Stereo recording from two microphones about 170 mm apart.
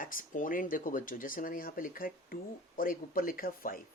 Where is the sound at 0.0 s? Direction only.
55° left (ahead or behind).